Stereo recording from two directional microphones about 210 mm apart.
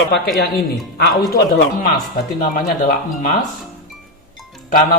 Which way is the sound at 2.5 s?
35° left (ahead or behind).